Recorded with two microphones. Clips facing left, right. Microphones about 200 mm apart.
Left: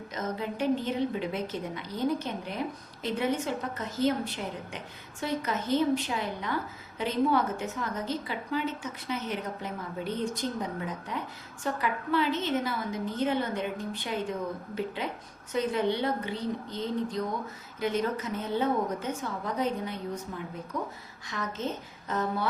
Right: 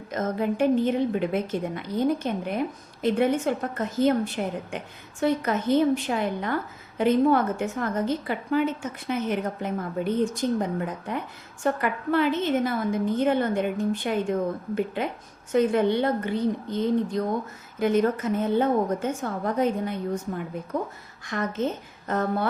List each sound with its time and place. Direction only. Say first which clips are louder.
0.1 s a woman's voice: right 8 dB; 50° right (ahead or behind)